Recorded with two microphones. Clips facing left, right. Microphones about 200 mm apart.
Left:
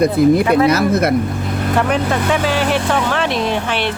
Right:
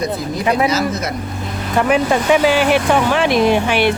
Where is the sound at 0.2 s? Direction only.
60° left (ahead or behind).